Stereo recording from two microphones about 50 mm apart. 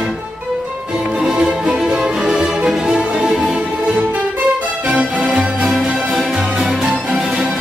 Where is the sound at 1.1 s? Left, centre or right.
Centre.